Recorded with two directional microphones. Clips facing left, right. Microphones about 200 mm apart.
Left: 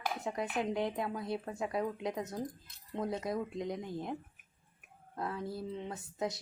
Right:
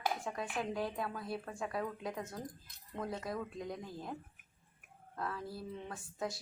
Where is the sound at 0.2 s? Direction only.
20° left (ahead or behind).